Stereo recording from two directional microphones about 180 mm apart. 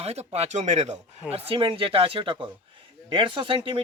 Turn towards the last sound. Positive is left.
turn(degrees=-30)  # may be behind; listen again after turning